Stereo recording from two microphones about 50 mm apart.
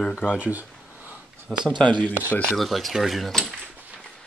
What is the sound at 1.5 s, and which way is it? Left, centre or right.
Speech, centre.